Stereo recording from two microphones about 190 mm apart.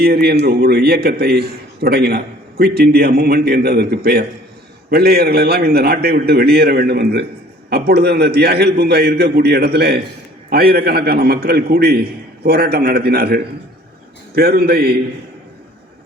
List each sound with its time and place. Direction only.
0.0 s a man's voice: 55° right (ahead or behind)